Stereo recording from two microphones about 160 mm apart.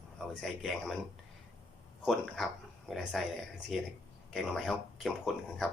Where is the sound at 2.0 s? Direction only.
Centre (ahead or behind).